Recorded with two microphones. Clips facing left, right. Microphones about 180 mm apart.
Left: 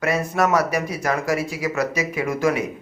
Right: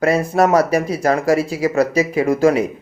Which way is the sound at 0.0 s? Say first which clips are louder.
Right 6 dB; 30° right (ahead or behind).